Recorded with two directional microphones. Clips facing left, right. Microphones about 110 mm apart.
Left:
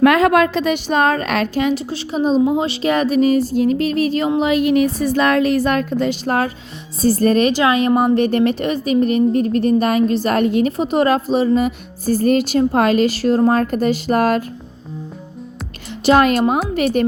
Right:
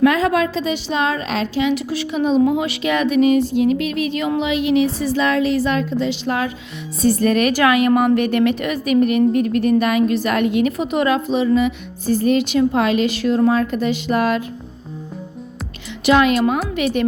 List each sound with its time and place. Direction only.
0.0 s a woman's voice: 60° left (ahead or behind)
1.7 s a woman's voice: 30° left (ahead or behind)
16.0 s a woman's voice: 40° left (ahead or behind)